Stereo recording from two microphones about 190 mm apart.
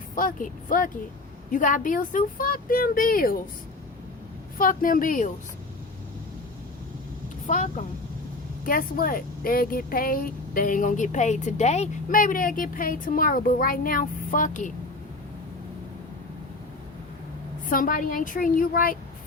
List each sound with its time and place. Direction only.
0.2 s speech: 45° left (ahead or behind)
4.5 s speech: 45° left (ahead or behind)
7.4 s speech: 45° left (ahead or behind)
17.7 s speech: 45° left (ahead or behind)